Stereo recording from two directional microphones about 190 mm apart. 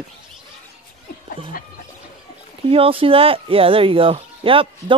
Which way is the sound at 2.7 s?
30° right (ahead or behind).